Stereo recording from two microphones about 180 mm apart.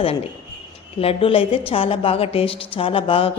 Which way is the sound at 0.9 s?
30° left (ahead or behind).